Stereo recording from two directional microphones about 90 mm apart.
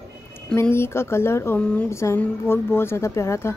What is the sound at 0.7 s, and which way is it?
A woman's voice, 30° left (ahead or behind).